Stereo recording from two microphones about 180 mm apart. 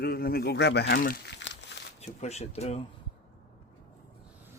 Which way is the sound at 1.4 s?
90° left.